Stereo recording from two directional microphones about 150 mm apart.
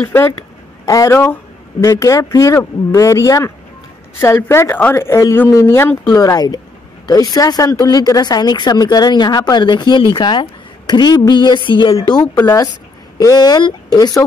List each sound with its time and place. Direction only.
0.0 s speech: 15° left (ahead or behind); by 12.0 s 30° left (ahead or behind)
13.2 s speech: 25° left (ahead or behind)